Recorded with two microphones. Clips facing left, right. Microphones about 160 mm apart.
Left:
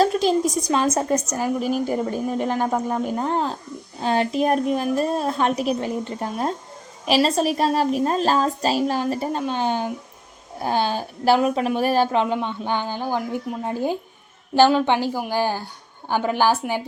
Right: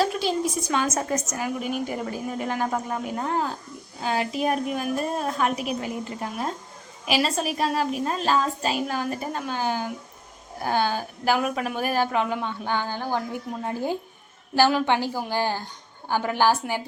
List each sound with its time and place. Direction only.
0.0 s a woman's voice: 40° left (ahead or behind); by 16.8 s 15° left (ahead or behind)